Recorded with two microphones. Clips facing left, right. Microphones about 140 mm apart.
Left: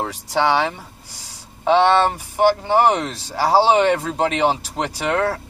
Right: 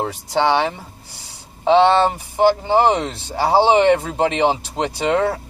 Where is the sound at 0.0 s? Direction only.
20° right (ahead or behind).